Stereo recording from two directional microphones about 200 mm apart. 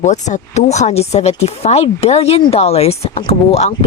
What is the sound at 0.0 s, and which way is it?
Speech, 35° left (ahead or behind).